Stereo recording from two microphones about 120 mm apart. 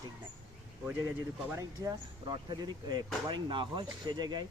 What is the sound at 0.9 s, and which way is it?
Speech, 20° right (ahead or behind).